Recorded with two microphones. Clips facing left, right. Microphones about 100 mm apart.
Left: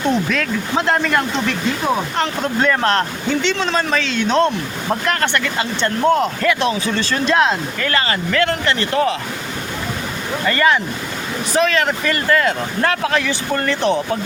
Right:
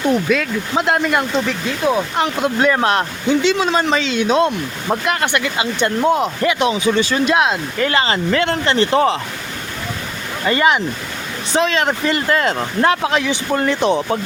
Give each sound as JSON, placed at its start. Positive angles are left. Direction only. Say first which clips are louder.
{"t": 0.3, "sound": "speech", "louder": "right 2 dB", "side_deg": -5}
{"t": 10.4, "sound": "speech", "louder": "right 1 dB", "side_deg": -20}